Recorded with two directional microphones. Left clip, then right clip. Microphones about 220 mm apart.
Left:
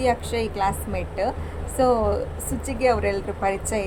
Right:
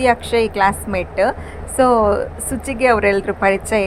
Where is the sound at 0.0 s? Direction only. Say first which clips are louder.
Right 8 dB; 20° right (ahead or behind).